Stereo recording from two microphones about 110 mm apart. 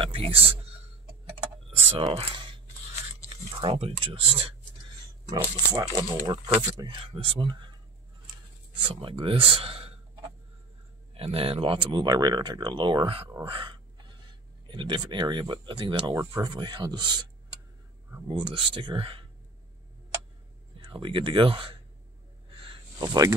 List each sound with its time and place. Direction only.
0.0 s a sound: 55° right (ahead or behind)
2.0 s speech: 50° right (ahead or behind)
5.3 s speech: 35° right (ahead or behind)
6.8 s speech: 50° right (ahead or behind)
8.8 s speech: 50° right (ahead or behind)
11.1 s speech: 60° right (ahead or behind)
13.4 s a sound: 50° right (ahead or behind)
14.7 s speech: 45° right (ahead or behind)
18.3 s speech: 45° right (ahead or behind)
20.8 s speech: 50° right (ahead or behind)
22.5 s a sound: 50° right (ahead or behind)
22.9 s speech: 35° right (ahead or behind)